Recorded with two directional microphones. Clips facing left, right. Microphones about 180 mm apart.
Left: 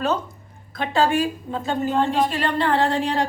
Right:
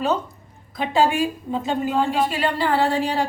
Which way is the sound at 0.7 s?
15° right (ahead or behind).